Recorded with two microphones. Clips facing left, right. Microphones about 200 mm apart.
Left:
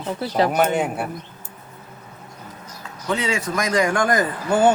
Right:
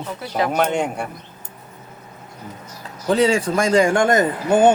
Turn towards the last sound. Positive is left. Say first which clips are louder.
# right 3 dB
turn(degrees=-20)  # may be behind; listen again after turning